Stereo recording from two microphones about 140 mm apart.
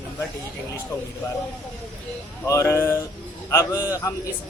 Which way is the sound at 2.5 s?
20° left (ahead or behind).